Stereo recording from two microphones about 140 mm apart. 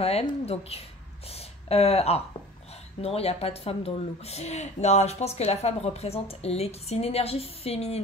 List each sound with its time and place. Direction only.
0.0 s a woman's voice: 45° left (ahead or behind)